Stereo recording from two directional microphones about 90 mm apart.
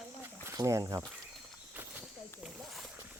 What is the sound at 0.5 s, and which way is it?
Speech, 40° right (ahead or behind).